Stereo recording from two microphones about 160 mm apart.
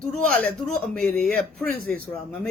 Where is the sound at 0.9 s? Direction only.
5° left (ahead or behind).